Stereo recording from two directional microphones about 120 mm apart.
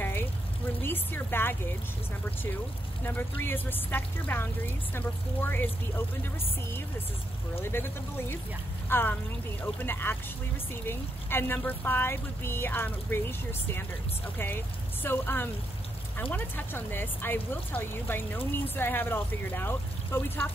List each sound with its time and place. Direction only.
0.8 s speech: 15° left (ahead or behind)
3.0 s speech: 15° left (ahead or behind)
7.6 s speech: 20° left (ahead or behind)
15.0 s speech: 15° left (ahead or behind)